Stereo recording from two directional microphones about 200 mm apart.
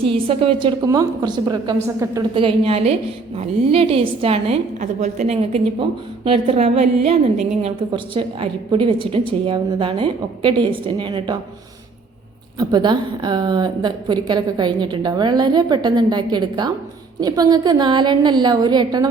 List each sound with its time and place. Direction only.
0.0 s a woman's voice: 25° right (ahead or behind)
12.5 s a woman's voice: 20° right (ahead or behind)